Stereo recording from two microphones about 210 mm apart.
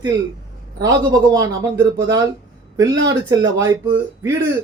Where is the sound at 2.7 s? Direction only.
15° right (ahead or behind).